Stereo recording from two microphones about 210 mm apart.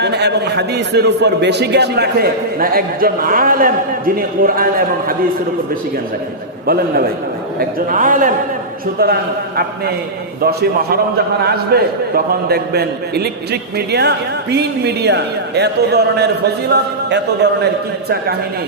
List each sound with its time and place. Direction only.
0.0 s a man's voice: 55° right (ahead or behind)
6.7 s a man's voice: 45° right (ahead or behind)
10.4 s a man's voice: 45° right (ahead or behind)